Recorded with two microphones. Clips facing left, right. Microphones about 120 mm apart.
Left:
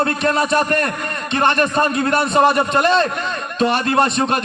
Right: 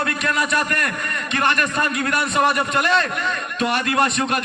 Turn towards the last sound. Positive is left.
turn(degrees=30)  # may be behind; listen again after turning